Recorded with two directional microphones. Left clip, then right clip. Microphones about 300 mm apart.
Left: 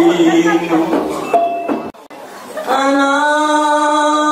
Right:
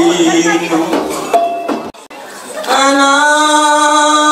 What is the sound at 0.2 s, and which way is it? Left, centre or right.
Music, centre.